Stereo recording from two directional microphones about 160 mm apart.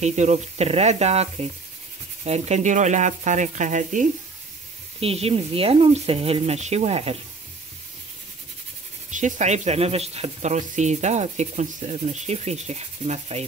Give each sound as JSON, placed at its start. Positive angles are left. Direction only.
{"t": 0.0, "sound": "speech", "side_deg": -45}
{"t": 5.0, "sound": "speech", "side_deg": -40}
{"t": 9.1, "sound": "speech", "side_deg": -50}